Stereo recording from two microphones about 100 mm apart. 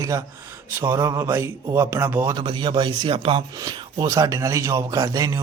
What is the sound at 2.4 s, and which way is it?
Speech, 50° right (ahead or behind).